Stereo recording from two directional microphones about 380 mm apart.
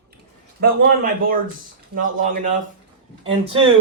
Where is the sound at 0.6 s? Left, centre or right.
Right.